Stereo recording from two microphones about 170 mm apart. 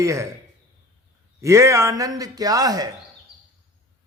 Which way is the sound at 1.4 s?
15° right (ahead or behind).